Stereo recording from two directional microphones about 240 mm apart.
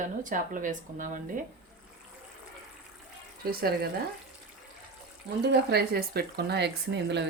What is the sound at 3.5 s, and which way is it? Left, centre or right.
Speech, right.